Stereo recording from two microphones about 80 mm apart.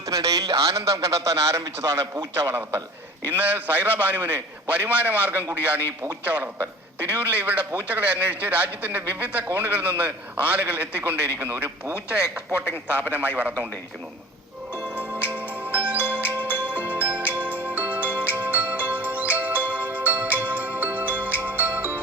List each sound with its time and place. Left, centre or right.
0.0 s a man's voice: right; by 13.7 s centre
14.8 s music: centre